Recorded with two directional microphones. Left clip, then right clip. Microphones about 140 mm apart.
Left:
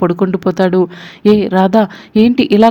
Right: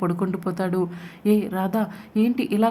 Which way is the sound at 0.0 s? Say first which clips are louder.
Left 12 dB; 35° left (ahead or behind).